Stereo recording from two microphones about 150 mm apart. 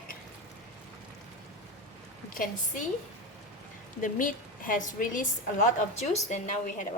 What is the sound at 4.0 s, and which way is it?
A woman's voice, 65° left (ahead or behind).